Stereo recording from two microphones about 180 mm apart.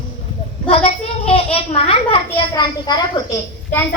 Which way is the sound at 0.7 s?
30° left (ahead or behind).